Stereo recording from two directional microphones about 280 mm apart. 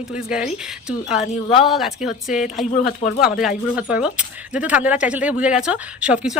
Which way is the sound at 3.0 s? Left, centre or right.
Left.